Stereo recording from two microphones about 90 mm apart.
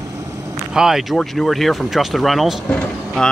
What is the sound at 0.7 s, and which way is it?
Speech, 5° right (ahead or behind).